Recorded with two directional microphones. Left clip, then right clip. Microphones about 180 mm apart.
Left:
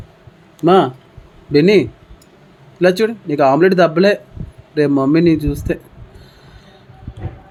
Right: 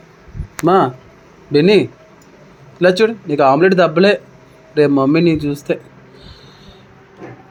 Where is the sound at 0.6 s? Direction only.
15° left (ahead or behind).